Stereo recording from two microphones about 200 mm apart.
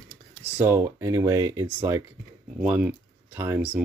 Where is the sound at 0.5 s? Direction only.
10° right (ahead or behind).